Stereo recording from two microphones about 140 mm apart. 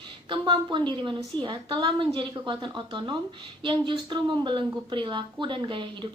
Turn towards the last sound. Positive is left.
turn(degrees=-35)  # may be behind; listen again after turning